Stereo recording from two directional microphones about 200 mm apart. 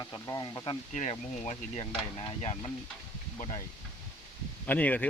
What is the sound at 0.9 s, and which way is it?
Speech, 35° left (ahead or behind).